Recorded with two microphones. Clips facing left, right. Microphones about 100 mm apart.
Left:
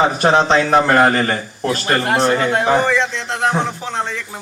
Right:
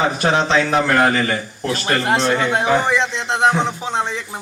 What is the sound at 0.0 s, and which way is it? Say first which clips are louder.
A man's voice: left 4 dB; 35° left (ahead or behind).